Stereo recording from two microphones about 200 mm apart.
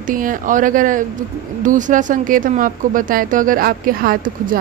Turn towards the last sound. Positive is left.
turn(degrees=-45)  # may be behind; listen again after turning